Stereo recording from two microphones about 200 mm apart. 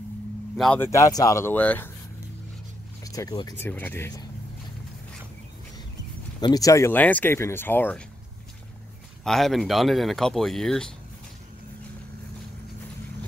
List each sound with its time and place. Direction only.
0.6 s speech: 5° left (ahead or behind)
0.8 s speech: 15° left (ahead or behind)
3.0 s speech: 15° left (ahead or behind)
6.4 s speech: 20° left (ahead or behind)
9.2 s speech: centre (ahead or behind)